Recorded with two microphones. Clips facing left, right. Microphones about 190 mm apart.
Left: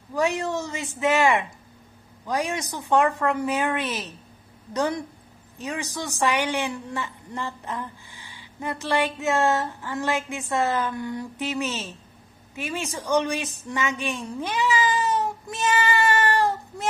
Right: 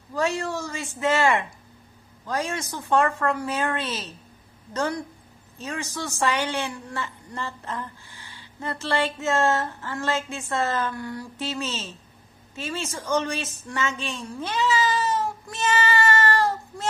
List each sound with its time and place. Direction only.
0.1 s a woman's voice: 15° left (ahead or behind)